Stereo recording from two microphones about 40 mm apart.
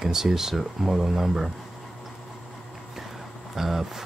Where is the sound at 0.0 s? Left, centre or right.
Centre.